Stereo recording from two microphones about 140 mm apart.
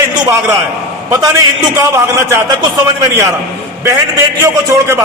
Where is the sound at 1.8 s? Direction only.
20° right (ahead or behind).